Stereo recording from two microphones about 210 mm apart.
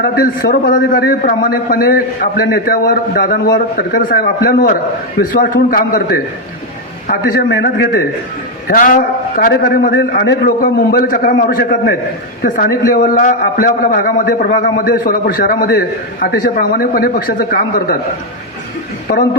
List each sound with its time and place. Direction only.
0.0 s a man's voice: 45° left (ahead or behind)
8.6 s a man's voice: 40° left (ahead or behind)
19.1 s a man's voice: 45° left (ahead or behind)